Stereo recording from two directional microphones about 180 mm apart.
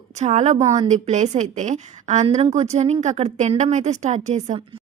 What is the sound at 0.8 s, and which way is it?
A woman's voice, 40° right (ahead or behind).